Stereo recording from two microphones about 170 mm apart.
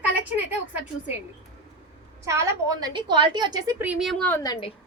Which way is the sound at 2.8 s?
25° right (ahead or behind).